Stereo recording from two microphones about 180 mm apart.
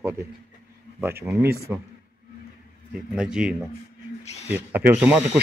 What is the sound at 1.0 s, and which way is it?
Speech, 10° right (ahead or behind).